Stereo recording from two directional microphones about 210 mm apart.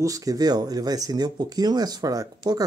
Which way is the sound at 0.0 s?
15° right (ahead or behind).